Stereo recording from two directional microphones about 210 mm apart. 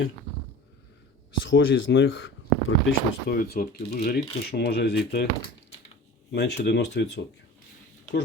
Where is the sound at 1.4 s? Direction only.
65° left (ahead or behind).